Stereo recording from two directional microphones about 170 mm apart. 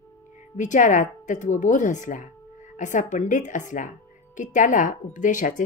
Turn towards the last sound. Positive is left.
turn(degrees=50)  # may be behind; listen again after turning